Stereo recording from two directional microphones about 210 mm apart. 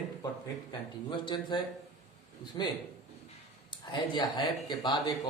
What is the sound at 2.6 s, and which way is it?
Speech, 20° left (ahead or behind).